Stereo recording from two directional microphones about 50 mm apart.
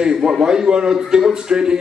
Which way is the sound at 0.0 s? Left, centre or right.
Centre.